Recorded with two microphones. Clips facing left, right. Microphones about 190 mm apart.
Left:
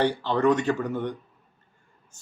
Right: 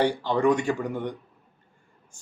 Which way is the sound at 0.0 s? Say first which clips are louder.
Even; 10° right (ahead or behind).